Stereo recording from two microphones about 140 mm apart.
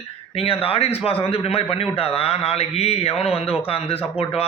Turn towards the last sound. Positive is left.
turn(degrees=45)  # may be behind; listen again after turning